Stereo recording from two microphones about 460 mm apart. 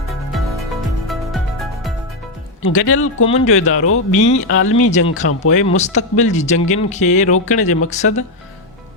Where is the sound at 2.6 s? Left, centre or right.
Left.